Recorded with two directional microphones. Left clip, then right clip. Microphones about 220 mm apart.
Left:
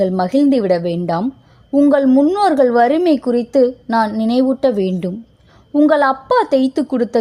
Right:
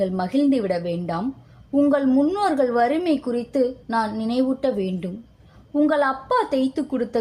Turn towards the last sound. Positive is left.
turn(degrees=40)  # may be behind; listen again after turning